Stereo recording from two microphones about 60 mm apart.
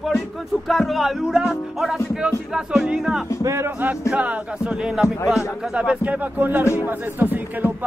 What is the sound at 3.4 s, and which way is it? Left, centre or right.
Speech, right.